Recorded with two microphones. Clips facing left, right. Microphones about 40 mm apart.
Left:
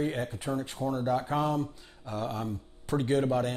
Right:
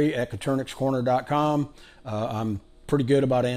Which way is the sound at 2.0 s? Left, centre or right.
Right.